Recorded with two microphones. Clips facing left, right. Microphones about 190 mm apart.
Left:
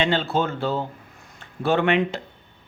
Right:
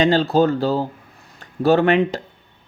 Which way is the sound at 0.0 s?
40° right (ahead or behind).